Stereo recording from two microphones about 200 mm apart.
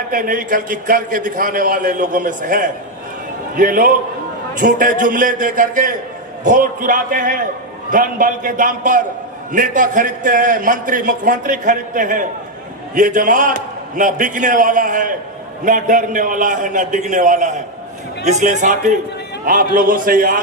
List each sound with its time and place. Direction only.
0.1 s a man's voice: 45° right (ahead or behind)